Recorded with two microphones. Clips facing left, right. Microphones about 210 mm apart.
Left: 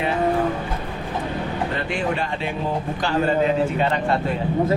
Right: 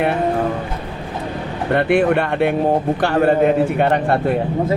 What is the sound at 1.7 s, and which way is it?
Speech, 60° right (ahead or behind).